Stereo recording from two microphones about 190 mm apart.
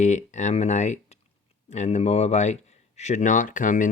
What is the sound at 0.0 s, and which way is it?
Speech, 40° left (ahead or behind).